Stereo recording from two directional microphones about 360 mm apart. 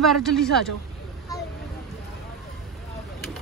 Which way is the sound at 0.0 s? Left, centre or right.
Centre.